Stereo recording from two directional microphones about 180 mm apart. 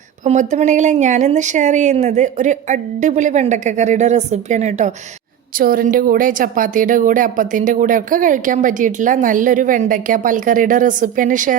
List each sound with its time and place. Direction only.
0.3 s speech: 40° right (ahead or behind)
5.5 s a woman's voice: 50° right (ahead or behind)